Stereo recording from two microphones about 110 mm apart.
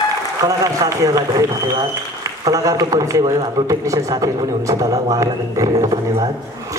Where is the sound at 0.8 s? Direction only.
30° right (ahead or behind).